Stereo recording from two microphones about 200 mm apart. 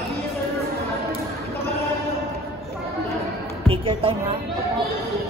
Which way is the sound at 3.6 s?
25° right (ahead or behind).